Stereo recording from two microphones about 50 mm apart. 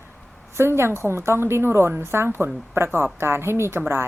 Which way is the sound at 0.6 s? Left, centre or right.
Right.